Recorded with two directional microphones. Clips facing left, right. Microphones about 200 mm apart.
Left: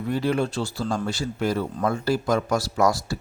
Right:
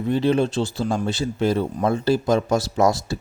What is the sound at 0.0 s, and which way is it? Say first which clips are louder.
Speech: right 4 dB; 25° right (ahead or behind).